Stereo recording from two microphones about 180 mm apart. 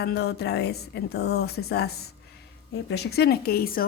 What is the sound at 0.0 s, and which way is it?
A woman's voice, 65° left (ahead or behind).